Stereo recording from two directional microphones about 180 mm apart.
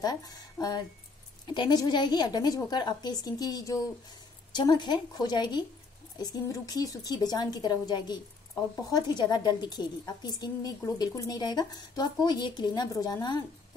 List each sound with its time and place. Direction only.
0.0 s a woman's voice: 20° left (ahead or behind)